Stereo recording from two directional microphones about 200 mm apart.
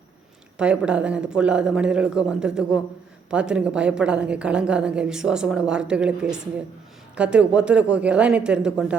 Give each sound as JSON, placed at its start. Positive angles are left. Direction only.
{"t": 0.5, "sound": "a woman's voice", "side_deg": -5}